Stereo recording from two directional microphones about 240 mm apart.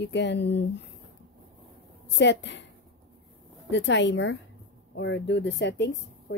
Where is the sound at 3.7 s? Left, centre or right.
Left.